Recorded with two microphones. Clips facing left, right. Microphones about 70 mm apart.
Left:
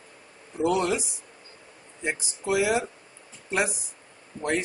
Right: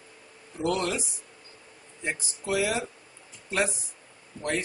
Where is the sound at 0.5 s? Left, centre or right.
Centre.